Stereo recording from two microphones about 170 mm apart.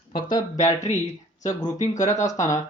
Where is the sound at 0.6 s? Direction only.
45° left (ahead or behind).